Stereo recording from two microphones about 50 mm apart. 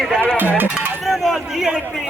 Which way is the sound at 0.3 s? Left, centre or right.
Right.